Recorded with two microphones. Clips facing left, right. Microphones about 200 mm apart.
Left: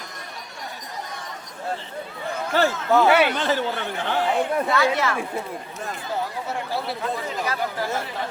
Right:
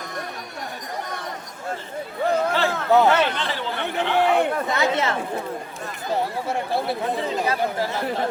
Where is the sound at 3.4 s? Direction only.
45° left (ahead or behind).